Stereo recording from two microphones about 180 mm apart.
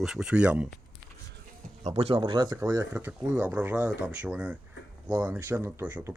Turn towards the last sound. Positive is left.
turn(degrees=-10)  # may be behind; listen again after turning